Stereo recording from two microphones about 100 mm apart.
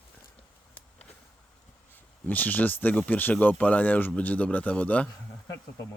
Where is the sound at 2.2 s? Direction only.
15° left (ahead or behind).